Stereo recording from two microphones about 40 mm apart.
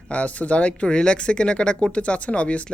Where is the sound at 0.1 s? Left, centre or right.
Left.